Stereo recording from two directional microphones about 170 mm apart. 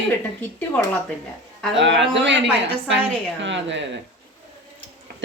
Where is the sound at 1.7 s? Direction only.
90° right.